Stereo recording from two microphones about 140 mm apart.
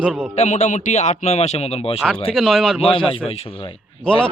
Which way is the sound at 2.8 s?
40° left (ahead or behind).